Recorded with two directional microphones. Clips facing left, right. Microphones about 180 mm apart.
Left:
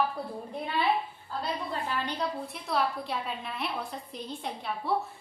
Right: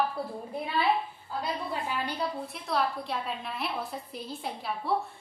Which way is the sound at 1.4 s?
10° right (ahead or behind).